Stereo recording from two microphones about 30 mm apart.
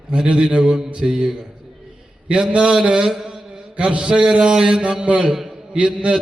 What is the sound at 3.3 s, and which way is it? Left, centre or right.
Mantra, right.